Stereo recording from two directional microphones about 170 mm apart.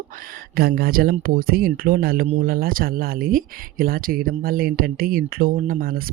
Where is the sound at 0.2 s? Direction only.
60° right (ahead or behind).